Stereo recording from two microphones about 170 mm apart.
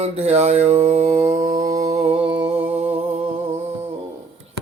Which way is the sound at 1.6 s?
20° right (ahead or behind).